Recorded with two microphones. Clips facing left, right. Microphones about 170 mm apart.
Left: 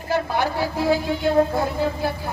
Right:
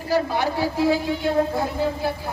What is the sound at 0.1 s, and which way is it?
Speech, 35° right (ahead or behind).